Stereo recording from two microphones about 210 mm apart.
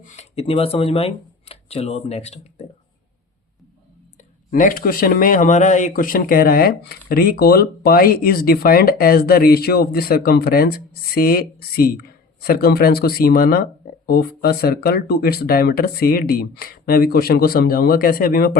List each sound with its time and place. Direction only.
0.0 s speech: 30° left (ahead or behind)
4.5 s speech: 40° left (ahead or behind)